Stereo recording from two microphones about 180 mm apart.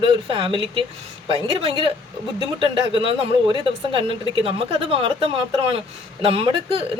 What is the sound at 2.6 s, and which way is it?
A man's voice, 30° right (ahead or behind).